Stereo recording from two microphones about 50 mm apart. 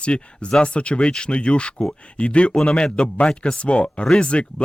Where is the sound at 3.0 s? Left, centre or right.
Left.